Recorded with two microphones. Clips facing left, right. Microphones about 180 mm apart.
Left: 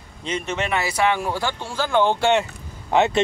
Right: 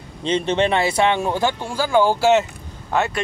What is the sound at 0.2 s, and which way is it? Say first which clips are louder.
Speech: right 7 dB; 30° right (ahead or behind).